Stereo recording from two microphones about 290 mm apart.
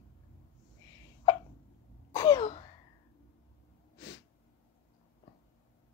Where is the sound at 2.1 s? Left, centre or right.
Centre.